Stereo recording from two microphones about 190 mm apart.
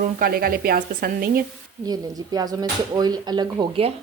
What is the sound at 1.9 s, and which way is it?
Speech, 20° right (ahead or behind).